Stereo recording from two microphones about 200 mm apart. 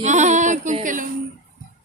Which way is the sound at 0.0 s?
35° right (ahead or behind).